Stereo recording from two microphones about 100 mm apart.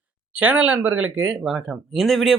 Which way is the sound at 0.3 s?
15° right (ahead or behind).